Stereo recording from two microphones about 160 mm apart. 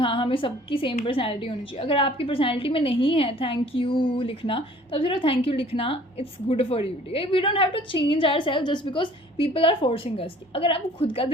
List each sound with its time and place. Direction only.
0.0 s a woman's voice: 35° left (ahead or behind)